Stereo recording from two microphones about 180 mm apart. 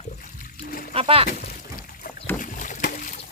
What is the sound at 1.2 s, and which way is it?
Pour, 55° left (ahead or behind).